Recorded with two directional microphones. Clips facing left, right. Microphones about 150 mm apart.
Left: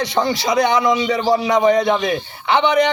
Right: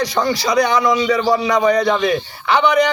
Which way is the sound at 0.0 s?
25° left (ahead or behind).